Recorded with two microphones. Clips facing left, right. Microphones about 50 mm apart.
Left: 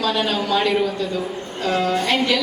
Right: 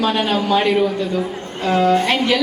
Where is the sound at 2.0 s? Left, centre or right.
Right.